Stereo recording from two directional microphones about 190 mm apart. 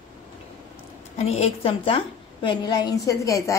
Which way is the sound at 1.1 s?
35° left (ahead or behind).